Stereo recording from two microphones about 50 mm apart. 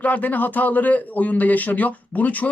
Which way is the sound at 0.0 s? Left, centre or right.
Left.